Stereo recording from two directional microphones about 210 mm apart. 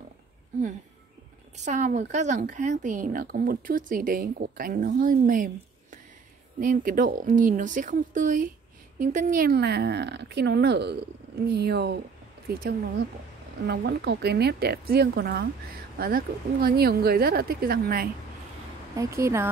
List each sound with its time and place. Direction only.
1.6 s speech: 35° right (ahead or behind)
18.9 s speech: 15° right (ahead or behind)